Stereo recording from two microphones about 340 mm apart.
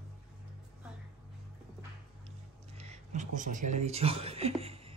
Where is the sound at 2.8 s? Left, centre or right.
Centre.